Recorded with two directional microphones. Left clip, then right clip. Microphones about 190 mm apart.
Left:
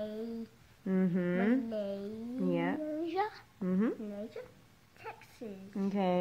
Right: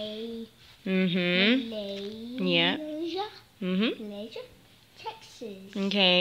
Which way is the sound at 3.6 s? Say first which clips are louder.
Right 5 dB; 10° right (ahead or behind).